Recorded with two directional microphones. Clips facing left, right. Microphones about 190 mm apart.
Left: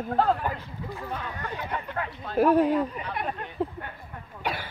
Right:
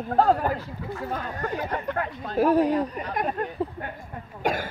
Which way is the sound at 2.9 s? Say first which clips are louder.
Right 5 dB; 40° right (ahead or behind).